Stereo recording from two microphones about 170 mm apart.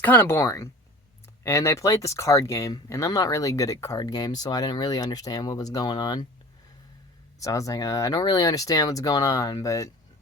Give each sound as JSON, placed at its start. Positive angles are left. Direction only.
{"t": 0.0, "sound": "speech", "side_deg": 10}
{"t": 7.3, "sound": "speech", "side_deg": 20}